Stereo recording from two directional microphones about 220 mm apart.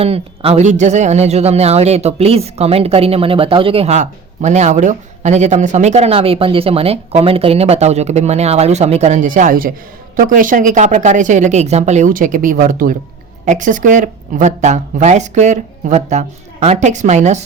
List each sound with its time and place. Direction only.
0.0 s speech: 25° right (ahead or behind)